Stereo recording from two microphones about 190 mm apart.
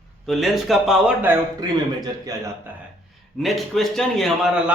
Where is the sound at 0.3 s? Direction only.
Centre (ahead or behind).